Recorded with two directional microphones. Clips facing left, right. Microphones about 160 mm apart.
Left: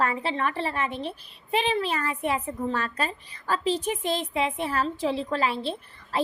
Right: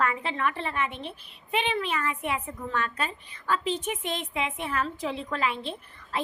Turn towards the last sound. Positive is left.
turn(degrees=35)  # may be behind; listen again after turning